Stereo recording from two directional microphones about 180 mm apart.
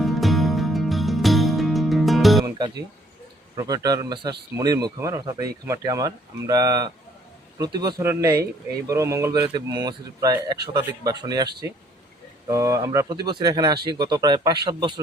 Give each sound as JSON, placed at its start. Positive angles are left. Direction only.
{"t": 0.0, "sound": "music", "side_deg": 0}
{"t": 2.4, "sound": "music", "side_deg": -25}
{"t": 3.5, "sound": "speech", "side_deg": -20}
{"t": 12.5, "sound": "speech", "side_deg": -15}